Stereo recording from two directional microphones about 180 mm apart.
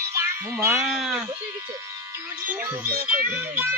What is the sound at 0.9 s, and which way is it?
Speech, centre (ahead or behind).